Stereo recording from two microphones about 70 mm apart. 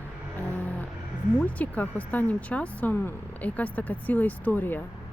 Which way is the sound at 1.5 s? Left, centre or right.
Left.